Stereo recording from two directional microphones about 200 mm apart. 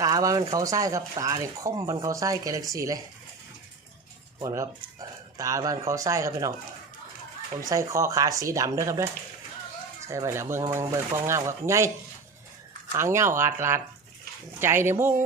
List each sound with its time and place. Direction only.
0.0 s speech: 15° right (ahead or behind)
4.4 s speech: 15° right (ahead or behind)
7.7 s speech: 15° right (ahead or behind)
10.1 s speech: 15° right (ahead or behind)
13.0 s speech: 10° right (ahead or behind)